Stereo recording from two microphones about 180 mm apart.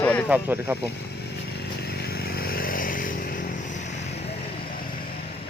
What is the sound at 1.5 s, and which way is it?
Vehicle, 65° left (ahead or behind).